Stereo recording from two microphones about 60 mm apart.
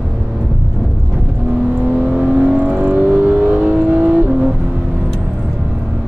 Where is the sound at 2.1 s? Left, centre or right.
Centre.